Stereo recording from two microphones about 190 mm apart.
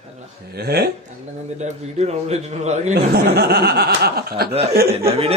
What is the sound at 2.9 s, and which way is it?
Speech, 60° right (ahead or behind).